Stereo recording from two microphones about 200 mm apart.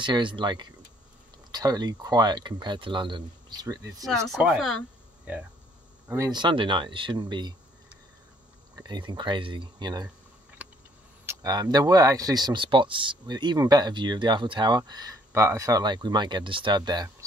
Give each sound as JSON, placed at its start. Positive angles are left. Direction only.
{"t": 0.0, "sound": "speech", "side_deg": -25}
{"t": 4.3, "sound": "speech", "side_deg": -5}
{"t": 6.0, "sound": "speech", "side_deg": -15}
{"t": 8.7, "sound": "speech", "side_deg": -20}
{"t": 10.6, "sound": "a sound", "side_deg": -10}
{"t": 11.2, "sound": "speech", "side_deg": -20}